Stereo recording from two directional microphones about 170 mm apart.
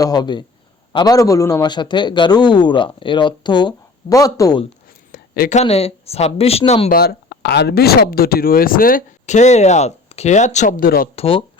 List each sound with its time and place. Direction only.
0.0 s a man's voice: 25° left (ahead or behind)
5.1 s a sound: 60° left (ahead or behind)
5.5 s speech: 40° left (ahead or behind)
6.9 s speech: 65° left (ahead or behind)
11.1 s speech: 35° left (ahead or behind)